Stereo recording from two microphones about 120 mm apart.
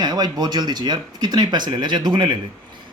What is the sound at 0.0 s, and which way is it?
Speech, 35° right (ahead or behind).